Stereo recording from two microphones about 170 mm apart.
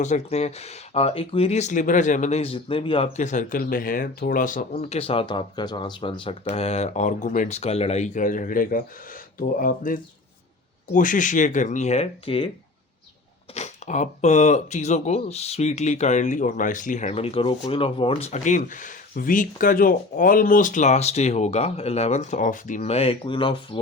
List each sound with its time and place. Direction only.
0.0 s speech: 40° left (ahead or behind)
4.8 s speech: 35° left (ahead or behind)
13.5 s speech: 40° left (ahead or behind)